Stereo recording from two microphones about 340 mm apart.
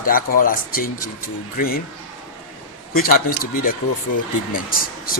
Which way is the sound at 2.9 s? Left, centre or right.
Left.